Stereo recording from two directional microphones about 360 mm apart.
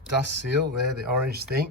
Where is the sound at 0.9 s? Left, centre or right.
Right.